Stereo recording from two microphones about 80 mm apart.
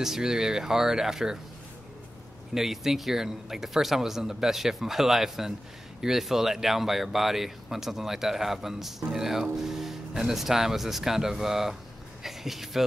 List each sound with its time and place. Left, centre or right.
0.0 s speech: centre
2.5 s speech: centre